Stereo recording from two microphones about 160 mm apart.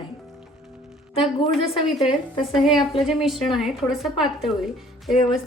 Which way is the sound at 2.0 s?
35° left (ahead or behind).